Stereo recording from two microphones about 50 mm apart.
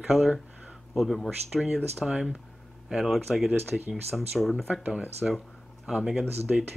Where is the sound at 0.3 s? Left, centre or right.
Centre.